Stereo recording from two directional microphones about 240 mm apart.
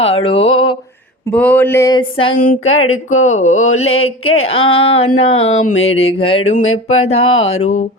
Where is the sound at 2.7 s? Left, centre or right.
Left.